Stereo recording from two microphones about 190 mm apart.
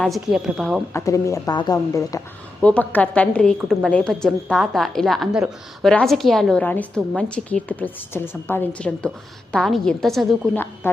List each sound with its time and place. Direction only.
0.0 s a woman's voice: centre (ahead or behind)
0.9 s a woman's voice: 15° left (ahead or behind)